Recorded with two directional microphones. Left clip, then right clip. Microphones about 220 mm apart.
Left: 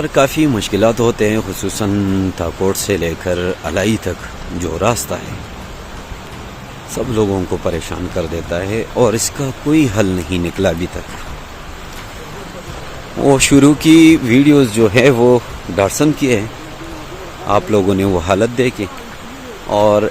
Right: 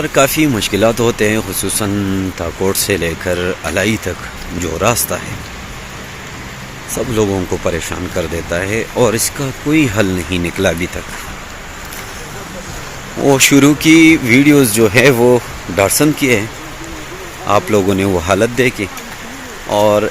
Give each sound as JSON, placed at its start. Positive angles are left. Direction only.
{"t": 0.0, "sound": "speech", "side_deg": 5}
{"t": 6.9, "sound": "speech", "side_deg": 0}
{"t": 13.2, "sound": "speech", "side_deg": 10}